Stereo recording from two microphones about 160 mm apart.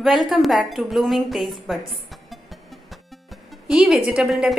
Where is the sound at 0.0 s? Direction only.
Centre (ahead or behind).